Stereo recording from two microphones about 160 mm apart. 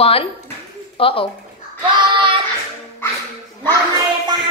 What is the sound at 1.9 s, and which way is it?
Child singing, 30° right (ahead or behind).